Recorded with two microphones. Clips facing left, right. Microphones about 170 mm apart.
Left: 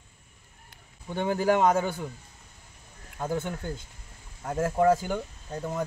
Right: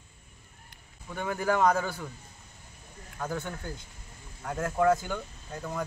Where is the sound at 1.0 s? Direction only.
30° left (ahead or behind).